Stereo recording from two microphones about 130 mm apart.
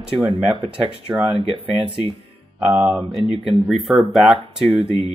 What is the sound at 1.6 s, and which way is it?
Speech, 40° right (ahead or behind).